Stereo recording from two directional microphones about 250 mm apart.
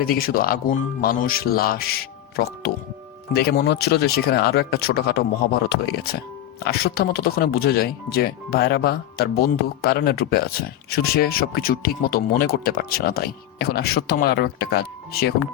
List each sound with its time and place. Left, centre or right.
0.0 s speech: left